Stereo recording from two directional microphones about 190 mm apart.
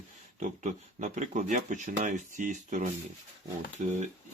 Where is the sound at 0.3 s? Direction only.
40° right (ahead or behind).